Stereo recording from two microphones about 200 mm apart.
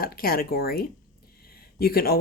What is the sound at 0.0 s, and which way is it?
Speech, 50° left (ahead or behind).